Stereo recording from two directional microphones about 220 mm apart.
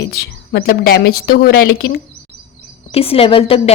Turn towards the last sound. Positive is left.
turn(degrees=25)  # may be behind; listen again after turning